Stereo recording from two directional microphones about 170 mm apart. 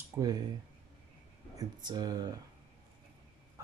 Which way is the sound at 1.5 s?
25° right (ahead or behind).